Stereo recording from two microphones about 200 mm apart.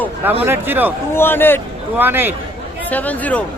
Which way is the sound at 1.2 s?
10° left (ahead or behind).